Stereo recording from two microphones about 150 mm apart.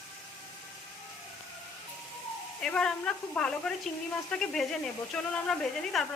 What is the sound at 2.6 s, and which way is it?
Speech, 5° left (ahead or behind).